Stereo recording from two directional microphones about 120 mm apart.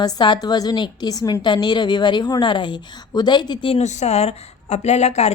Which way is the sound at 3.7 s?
70° left (ahead or behind).